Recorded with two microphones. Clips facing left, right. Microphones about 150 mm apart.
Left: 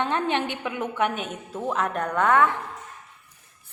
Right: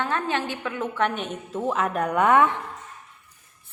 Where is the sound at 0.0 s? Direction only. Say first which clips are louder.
Left 1 dB; 20° left (ahead or behind); by 2.6 s 15° right (ahead or behind).